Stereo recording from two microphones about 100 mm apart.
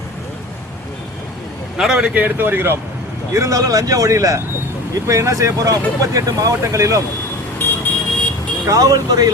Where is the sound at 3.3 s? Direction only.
35° right (ahead or behind).